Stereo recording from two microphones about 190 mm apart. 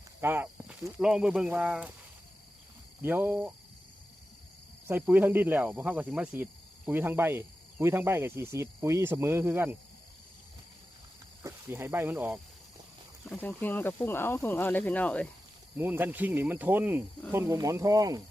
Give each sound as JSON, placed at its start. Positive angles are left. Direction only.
{"t": 0.2, "sound": "speech", "side_deg": -10}
{"t": 3.0, "sound": "speech", "side_deg": -10}
{"t": 4.9, "sound": "speech", "side_deg": -10}
{"t": 11.4, "sound": "speech", "side_deg": -10}
{"t": 13.2, "sound": "speech", "side_deg": 10}
{"t": 15.8, "sound": "speech", "side_deg": -10}